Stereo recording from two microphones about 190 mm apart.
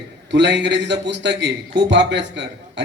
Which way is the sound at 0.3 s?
65° right (ahead or behind).